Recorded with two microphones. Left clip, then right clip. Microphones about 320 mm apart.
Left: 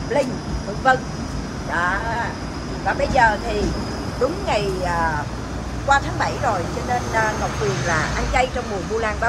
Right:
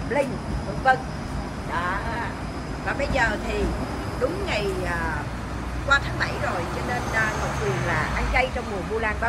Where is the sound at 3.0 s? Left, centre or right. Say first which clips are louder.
Left 7 dB; left.